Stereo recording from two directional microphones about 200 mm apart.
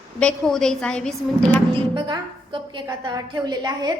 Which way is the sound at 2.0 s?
20° right (ahead or behind).